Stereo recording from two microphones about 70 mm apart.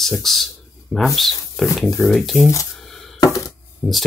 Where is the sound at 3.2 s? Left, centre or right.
Left.